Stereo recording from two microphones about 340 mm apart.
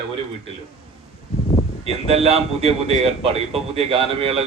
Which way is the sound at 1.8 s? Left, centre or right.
Centre.